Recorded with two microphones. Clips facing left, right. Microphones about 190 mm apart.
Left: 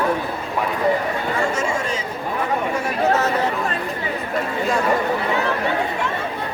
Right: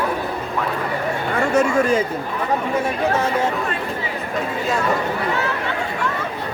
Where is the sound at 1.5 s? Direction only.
60° right (ahead or behind).